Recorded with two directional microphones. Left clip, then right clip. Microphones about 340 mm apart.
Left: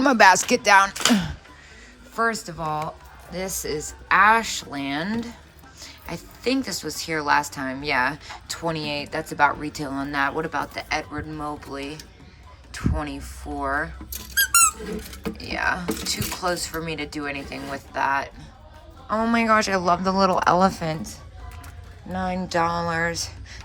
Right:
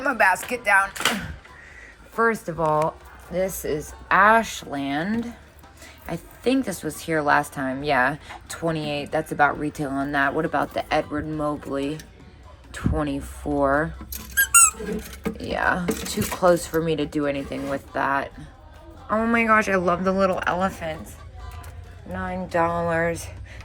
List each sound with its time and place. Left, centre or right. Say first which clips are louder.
0.0 s music: left 5 dB; centre
2.1 s a woman's voice: right 2 dB; centre
14.4 s squeak: right 1 dB; centre
15.4 s speech: right 2 dB; centre
22.2 s speech: even; centre